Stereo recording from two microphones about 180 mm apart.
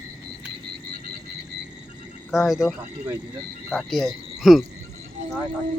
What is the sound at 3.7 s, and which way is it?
Speech, centre (ahead or behind).